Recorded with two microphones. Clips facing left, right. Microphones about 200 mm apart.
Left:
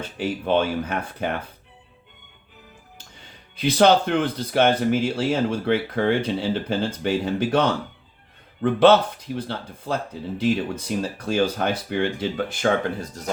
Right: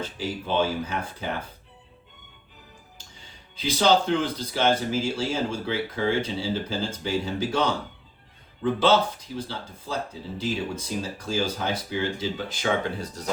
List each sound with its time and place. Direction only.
0.2 s speech: 60° left (ahead or behind)
3.5 s speech: 60° left (ahead or behind)